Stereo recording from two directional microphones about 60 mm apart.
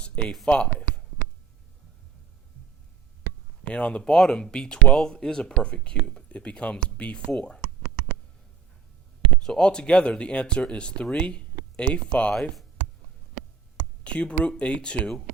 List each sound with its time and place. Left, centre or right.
0.4 s a sound: centre
3.6 s speech: centre
9.4 s speech: centre
12.3 s speech: centre
14.0 s speech: centre